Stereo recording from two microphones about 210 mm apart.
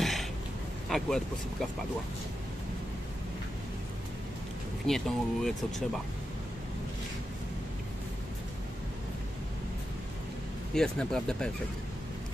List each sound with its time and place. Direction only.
0.0 s a sound: centre (ahead or behind)
0.8 s speech: centre (ahead or behind)
4.8 s speech: centre (ahead or behind)
10.7 s speech: 5° left (ahead or behind)